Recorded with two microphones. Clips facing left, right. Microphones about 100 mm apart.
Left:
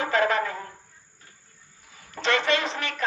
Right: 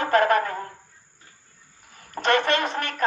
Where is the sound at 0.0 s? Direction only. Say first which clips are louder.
Right 4 dB; 55° right (ahead or behind).